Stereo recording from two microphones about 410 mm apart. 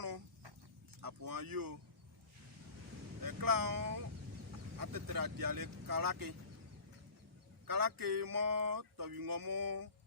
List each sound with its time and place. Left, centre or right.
0.0 s chicken: right
1.0 s a sound: right
3.2 s boat: right
4.8 s speech: right
7.7 s speech: right